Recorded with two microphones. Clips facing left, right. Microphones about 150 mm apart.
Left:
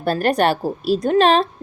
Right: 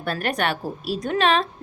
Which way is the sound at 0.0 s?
35° left (ahead or behind).